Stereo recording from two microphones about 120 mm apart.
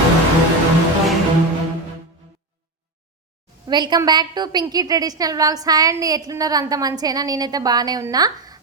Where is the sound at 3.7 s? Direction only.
35° right (ahead or behind).